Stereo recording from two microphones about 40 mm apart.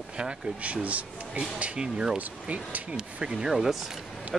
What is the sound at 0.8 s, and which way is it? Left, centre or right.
Speech, right.